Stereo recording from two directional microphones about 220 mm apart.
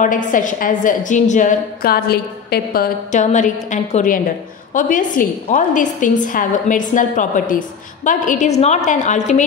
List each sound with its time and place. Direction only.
0.0 s a woman's voice: 35° left (ahead or behind)